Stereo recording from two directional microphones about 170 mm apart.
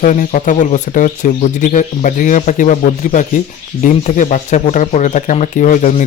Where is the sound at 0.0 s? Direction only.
50° left (ahead or behind).